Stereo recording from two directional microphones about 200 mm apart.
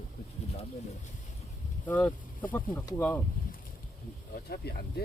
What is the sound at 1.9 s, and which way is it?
Speech, 10° left (ahead or behind).